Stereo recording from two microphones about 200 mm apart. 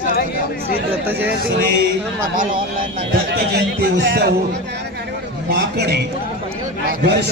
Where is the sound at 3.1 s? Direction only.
55° right (ahead or behind).